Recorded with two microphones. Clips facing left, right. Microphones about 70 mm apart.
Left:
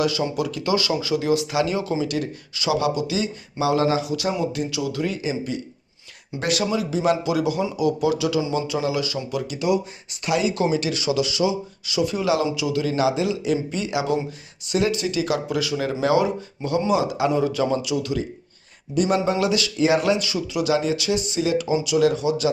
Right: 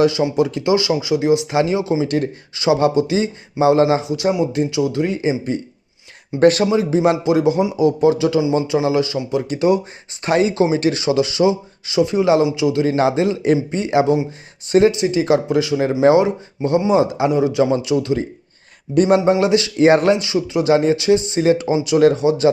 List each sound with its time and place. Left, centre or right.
0.0 s speech: right
2.0 s speech: right
13.0 s speech: right
19.7 s speech: right
20.1 s speech: right